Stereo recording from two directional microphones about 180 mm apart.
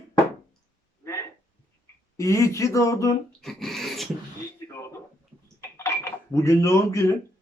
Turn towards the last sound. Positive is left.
turn(degrees=15)  # may be behind; listen again after turning